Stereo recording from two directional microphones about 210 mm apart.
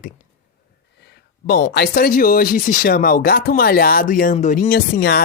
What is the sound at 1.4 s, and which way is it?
Speech, 45° left (ahead or behind).